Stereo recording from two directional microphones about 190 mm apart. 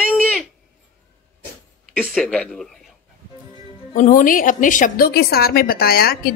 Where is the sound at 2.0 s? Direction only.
5° left (ahead or behind).